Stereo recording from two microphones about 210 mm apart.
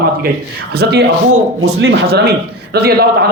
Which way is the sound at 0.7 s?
50° right (ahead or behind).